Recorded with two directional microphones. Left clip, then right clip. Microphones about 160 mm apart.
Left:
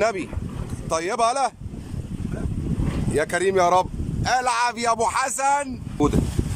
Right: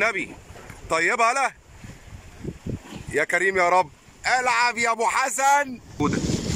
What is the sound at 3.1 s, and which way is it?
Speech, 10° left (ahead or behind).